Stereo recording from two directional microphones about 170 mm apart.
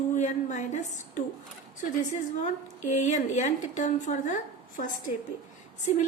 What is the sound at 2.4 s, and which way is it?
A woman's voice, 45° left (ahead or behind).